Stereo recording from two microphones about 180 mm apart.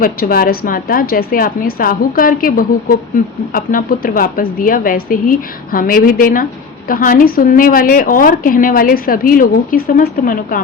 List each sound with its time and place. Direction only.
0.0 s a woman's voice: 55° left (ahead or behind)